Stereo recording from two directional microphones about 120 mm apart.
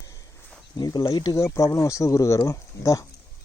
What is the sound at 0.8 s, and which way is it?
Speech, 35° left (ahead or behind).